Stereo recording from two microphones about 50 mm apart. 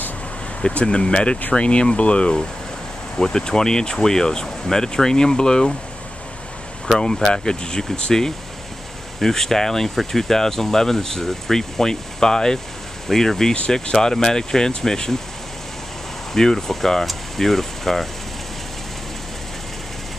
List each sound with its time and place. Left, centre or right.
0.6 s speech: centre
7.0 s speech: centre
16.3 s speech: centre